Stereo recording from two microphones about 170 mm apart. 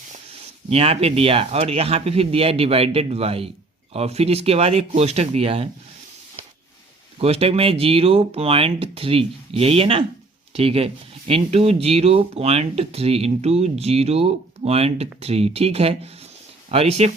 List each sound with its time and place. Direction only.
0.7 s speech: 35° right (ahead or behind)
7.2 s speech: 35° right (ahead or behind)